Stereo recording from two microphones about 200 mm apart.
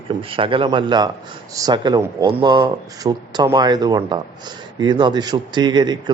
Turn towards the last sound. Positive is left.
turn(degrees=-20)  # may be behind; listen again after turning